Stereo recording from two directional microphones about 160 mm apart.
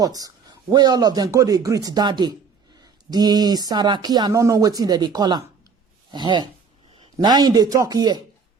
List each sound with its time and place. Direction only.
0.0 s speech: 25° right (ahead or behind)